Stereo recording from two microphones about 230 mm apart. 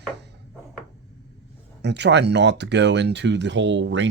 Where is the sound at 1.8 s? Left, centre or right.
Right.